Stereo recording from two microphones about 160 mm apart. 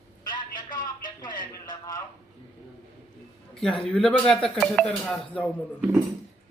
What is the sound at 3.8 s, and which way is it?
Speech, 5° left (ahead or behind).